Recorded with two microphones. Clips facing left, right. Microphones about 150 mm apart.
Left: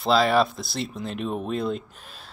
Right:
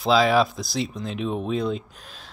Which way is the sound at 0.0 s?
Centre (ahead or behind).